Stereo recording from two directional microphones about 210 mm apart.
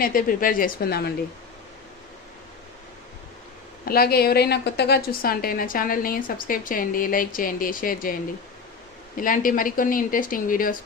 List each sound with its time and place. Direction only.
0.0 s speech: 40° left (ahead or behind)
3.8 s a woman's voice: 45° left (ahead or behind)
9.1 s speech: 40° left (ahead or behind)